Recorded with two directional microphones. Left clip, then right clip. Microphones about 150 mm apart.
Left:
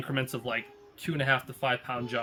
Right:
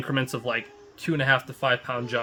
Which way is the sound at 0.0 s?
45° right (ahead or behind).